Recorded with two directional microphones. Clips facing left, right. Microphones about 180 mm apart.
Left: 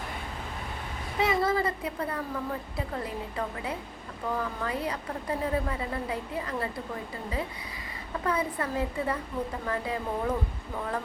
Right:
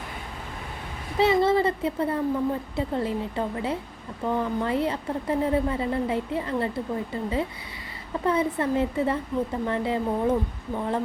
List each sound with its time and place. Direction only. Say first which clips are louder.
1.2 s a woman's voice: right 6 dB; 25° right (ahead or behind)